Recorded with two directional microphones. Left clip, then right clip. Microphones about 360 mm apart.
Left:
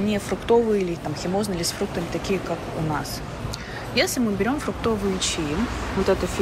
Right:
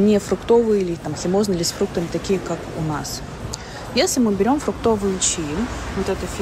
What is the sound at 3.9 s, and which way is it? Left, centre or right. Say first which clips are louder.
Speech: right 4 dB; centre.